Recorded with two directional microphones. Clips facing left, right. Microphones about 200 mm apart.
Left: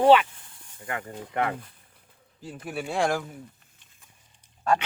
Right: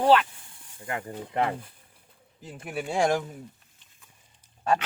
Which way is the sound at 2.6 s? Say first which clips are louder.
Right 1 dB; 15° right (ahead or behind).